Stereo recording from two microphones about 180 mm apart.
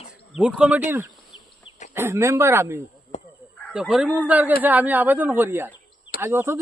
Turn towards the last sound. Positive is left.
turn(degrees=-15)  # may be behind; listen again after turning